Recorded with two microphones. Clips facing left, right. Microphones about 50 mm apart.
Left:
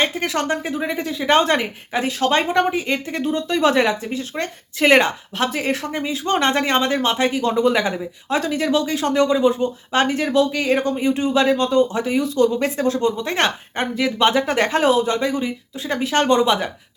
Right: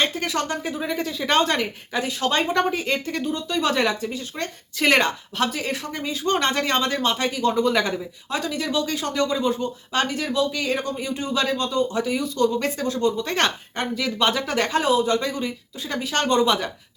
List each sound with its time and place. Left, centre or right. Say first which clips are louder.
0.0 s speech: left 3 dB; left; by 3.0 s centre
3.1 s speech: left 4 dB; left
7.5 s speech: left 3 dB; centre
8.3 s speech: left 6 dB; left
9.1 s speech: left 7 dB; centre
9.5 s speech: left 4 dB; left
15.1 s speech: left 3 dB; left